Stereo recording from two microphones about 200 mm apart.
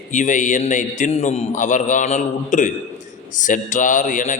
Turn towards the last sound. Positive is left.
turn(degrees=40)  # may be behind; listen again after turning